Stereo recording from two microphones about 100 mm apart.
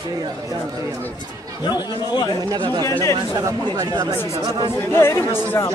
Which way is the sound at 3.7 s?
40° right (ahead or behind).